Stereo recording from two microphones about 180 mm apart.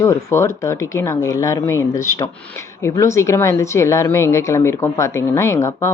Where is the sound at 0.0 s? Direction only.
15° left (ahead or behind).